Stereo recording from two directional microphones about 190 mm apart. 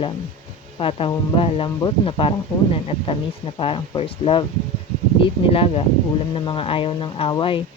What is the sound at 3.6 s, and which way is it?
Speech, 30° left (ahead or behind).